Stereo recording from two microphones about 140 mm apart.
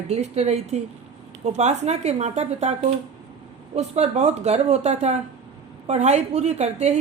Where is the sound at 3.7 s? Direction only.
50° right (ahead or behind).